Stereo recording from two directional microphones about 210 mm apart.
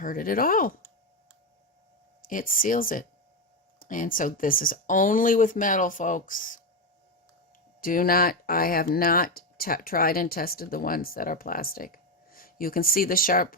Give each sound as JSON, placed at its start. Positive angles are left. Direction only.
{"t": 0.0, "sound": "speech", "side_deg": 40}
{"t": 2.2, "sound": "speech", "side_deg": 40}
{"t": 7.8, "sound": "speech", "side_deg": 40}